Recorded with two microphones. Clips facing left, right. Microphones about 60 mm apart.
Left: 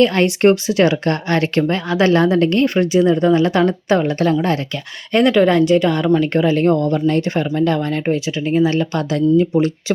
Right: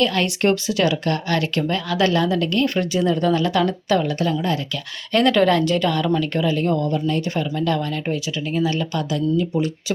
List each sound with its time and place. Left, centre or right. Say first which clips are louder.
0.0 s speech: left 6 dB; left
2.9 s speech: left 7 dB; left
5.1 s speech: left 3 dB; centre; by 7.2 s left
7.2 s speech: left 6 dB; left
9.0 s speech: left 7 dB; left